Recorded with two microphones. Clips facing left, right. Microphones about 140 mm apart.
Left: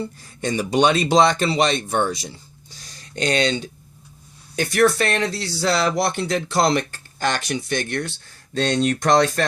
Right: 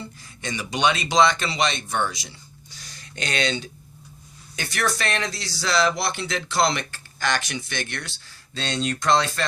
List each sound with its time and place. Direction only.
0.0 s speech: 35° left (ahead or behind)
8.5 s speech: 50° left (ahead or behind)